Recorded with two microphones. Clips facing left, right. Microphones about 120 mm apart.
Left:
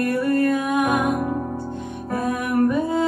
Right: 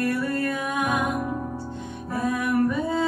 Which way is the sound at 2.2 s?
15° left (ahead or behind).